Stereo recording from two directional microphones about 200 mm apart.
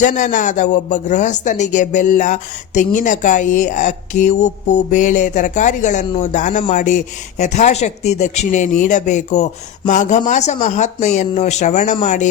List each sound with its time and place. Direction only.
0.0 s speech: 40° left (ahead or behind)